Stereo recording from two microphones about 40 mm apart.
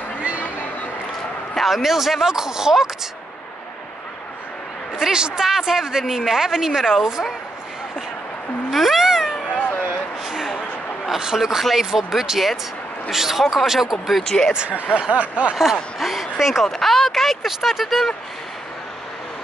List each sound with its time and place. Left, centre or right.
0.2 s a sound: right
1.6 s a woman's voice: centre
4.9 s a woman's voice: centre
8.6 s cat: centre
10.2 s a sound: centre
11.1 s a man's voice: centre
14.2 s speech: centre
15.0 s speech: right
15.5 s speech: centre
16.6 s a sound: centre
17.5 s speech: centre